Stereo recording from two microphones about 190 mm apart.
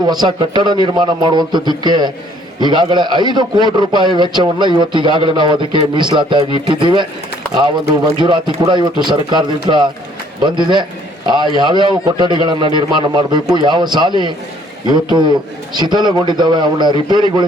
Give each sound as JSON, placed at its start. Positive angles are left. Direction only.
{"t": 0.0, "sound": "a man's voice", "side_deg": -20}
{"t": 8.2, "sound": "a man's voice", "side_deg": -25}